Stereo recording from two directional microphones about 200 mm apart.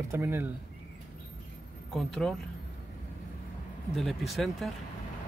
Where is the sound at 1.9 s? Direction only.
5° left (ahead or behind).